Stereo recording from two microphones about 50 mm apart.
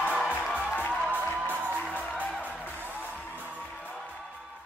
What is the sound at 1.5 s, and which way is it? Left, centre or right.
Music, right.